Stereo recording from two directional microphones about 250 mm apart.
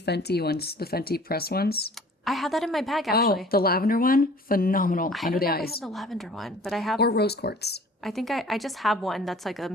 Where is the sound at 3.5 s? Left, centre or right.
Left.